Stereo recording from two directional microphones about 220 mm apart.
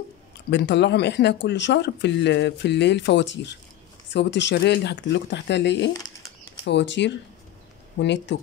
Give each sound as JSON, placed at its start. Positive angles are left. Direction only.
{"t": 0.5, "sound": "speech", "side_deg": 50}